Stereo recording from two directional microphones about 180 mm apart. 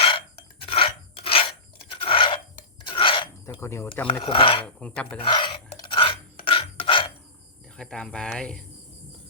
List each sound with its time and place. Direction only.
0.0 s filing: 30° left (ahead or behind)
1.9 s a sound: 30° left (ahead or behind)
3.6 s speech: 15° left (ahead or behind)
4.2 s speech: 30° left (ahead or behind)
4.6 s speech: 5° left (ahead or behind)
5.2 s filing: 25° left (ahead or behind)
7.8 s speech: 5° left (ahead or behind)